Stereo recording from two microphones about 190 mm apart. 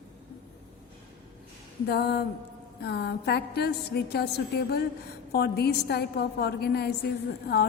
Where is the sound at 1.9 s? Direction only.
60° left (ahead or behind).